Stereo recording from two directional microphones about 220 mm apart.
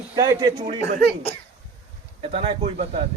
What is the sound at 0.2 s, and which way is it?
Speech, 20° right (ahead or behind).